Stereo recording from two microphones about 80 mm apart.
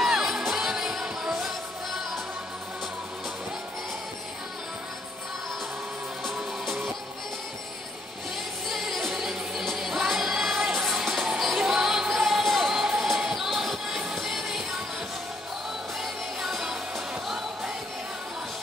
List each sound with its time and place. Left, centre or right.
0.0 s music: centre
6.2 s music: centre
8.6 s music: centre
16.0 s music: centre